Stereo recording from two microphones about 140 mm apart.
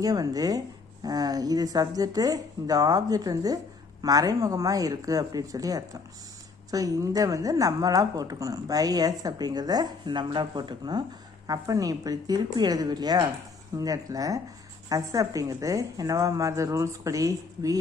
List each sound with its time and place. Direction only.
0.0 s a woman's voice: 25° right (ahead or behind)